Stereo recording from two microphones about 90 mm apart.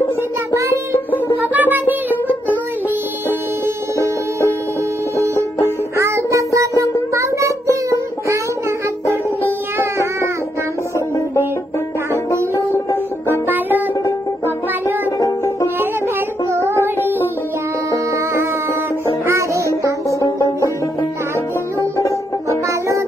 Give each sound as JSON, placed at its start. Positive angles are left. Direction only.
{"t": 1.5, "sound": "music", "side_deg": -20}
{"t": 5.1, "sound": "music", "side_deg": -35}
{"t": 13.5, "sound": "music", "side_deg": -20}
{"t": 15.1, "sound": "music", "side_deg": 40}
{"t": 16.6, "sound": "music", "side_deg": -25}
{"t": 20.1, "sound": "banjo", "side_deg": 35}
{"t": 21.7, "sound": "banjo", "side_deg": 35}
{"t": 22.7, "sound": "music", "side_deg": -35}